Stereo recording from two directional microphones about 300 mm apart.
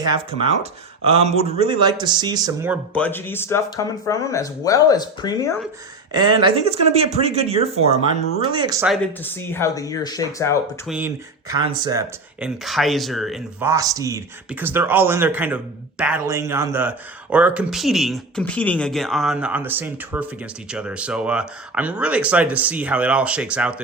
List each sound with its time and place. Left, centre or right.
0.0 s speech: centre
2.9 s speech: centre
6.1 s speech: centre
8.9 s speech: centre
10.8 s speech: centre
12.6 s speech: centre